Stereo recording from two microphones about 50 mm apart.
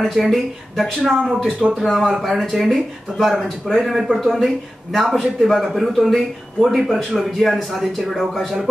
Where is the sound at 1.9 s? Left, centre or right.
Centre.